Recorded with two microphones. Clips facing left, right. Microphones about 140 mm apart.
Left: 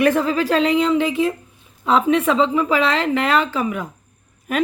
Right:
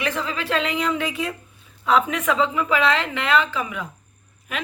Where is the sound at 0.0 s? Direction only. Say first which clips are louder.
Left 10 dB; 45° left (ahead or behind).